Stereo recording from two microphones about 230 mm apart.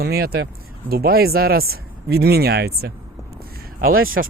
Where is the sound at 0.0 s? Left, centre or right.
Right.